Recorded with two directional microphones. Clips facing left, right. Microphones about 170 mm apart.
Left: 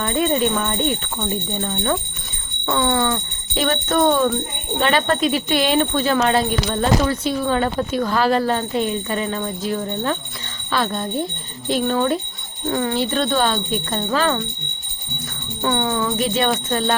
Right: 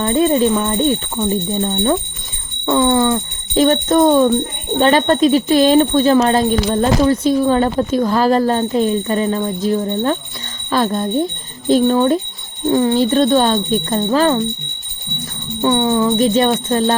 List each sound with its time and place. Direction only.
0.0 s speech: 30° right (ahead or behind)
13.0 s speech: 40° right (ahead or behind)
15.6 s speech: 25° right (ahead or behind)